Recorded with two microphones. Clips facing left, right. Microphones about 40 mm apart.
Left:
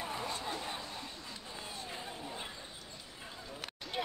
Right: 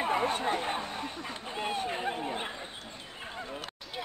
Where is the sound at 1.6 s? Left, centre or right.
Right.